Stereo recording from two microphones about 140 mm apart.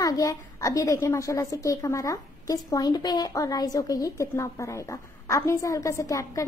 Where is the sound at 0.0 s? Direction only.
25° left (ahead or behind).